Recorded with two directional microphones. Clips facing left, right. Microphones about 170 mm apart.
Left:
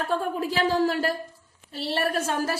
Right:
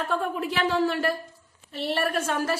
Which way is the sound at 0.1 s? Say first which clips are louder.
Left 1 dB; 35° left (ahead or behind).